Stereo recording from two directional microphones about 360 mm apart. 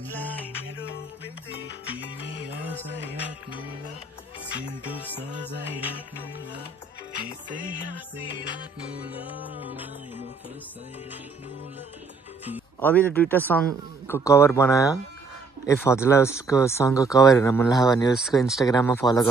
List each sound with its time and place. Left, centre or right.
0.2 s music: centre
3.1 s music: centre
4.9 s music: centre
7.2 s music: right
8.5 s music: centre
12.8 s speech: centre